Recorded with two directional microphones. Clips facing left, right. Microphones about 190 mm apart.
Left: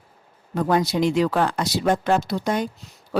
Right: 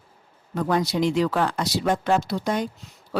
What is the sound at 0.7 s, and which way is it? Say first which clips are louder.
A woman's voice: left 2 dB; 50° left (ahead or behind).